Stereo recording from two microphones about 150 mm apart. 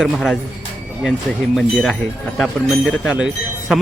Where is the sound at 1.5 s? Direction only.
Centre (ahead or behind).